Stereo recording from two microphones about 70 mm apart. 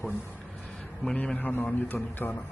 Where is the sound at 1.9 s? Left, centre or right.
Centre.